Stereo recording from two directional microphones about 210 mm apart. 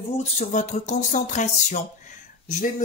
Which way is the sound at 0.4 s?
35° left (ahead or behind).